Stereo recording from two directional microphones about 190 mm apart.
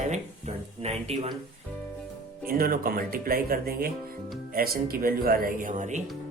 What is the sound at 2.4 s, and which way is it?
Speech, 50° right (ahead or behind).